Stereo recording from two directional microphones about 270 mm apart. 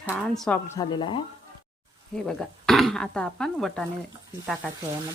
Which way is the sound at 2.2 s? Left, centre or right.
Centre.